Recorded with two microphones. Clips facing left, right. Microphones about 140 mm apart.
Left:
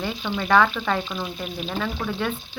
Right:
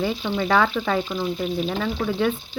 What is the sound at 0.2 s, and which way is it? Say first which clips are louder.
Speech: left 4 dB; 30° right (ahead or behind).